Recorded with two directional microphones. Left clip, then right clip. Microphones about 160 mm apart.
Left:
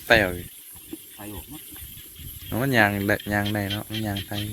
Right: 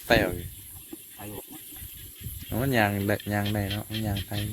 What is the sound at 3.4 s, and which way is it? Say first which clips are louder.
Speech: left 4 dB; 5° left (ahead or behind).